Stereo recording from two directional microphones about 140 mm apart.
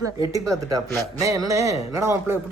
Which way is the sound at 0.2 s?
25° right (ahead or behind).